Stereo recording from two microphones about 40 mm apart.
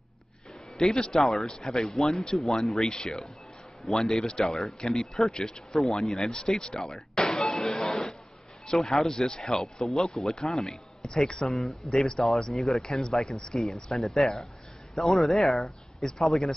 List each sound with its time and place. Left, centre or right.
0.7 s speech: centre
2.9 s speech: centre